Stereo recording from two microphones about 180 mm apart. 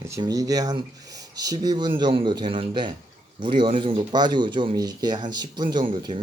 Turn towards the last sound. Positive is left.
turn(degrees=-25)  # may be behind; listen again after turning